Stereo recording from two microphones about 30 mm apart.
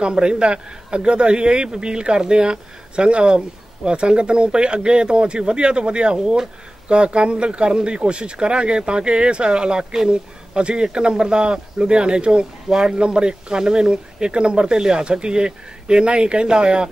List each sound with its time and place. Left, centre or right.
0.0 s speech: right
6.1 s speech: centre
6.9 s speech: right
12.6 s speech: centre
12.9 s speech: right